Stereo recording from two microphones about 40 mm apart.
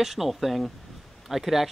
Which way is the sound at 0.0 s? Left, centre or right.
Centre.